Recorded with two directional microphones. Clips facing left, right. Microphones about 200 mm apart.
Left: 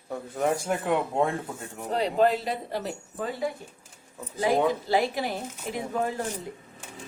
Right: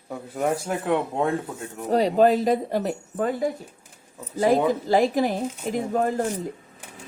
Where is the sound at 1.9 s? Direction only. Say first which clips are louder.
Right 5 dB; 40° right (ahead or behind).